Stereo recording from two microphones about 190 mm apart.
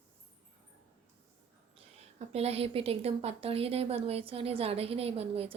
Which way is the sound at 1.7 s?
35° right (ahead or behind).